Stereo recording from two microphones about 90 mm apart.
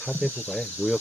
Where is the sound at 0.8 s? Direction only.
10° right (ahead or behind).